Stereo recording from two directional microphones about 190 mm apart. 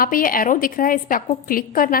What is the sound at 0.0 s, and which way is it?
A woman's voice, 50° left (ahead or behind).